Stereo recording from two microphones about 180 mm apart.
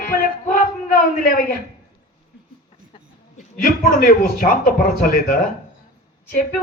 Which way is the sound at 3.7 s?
50° left (ahead or behind).